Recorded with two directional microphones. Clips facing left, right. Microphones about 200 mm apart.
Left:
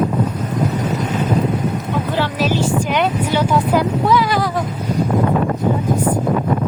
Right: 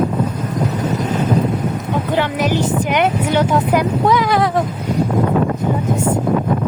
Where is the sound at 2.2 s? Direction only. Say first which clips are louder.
Right 1 dB; 15° right (ahead or behind).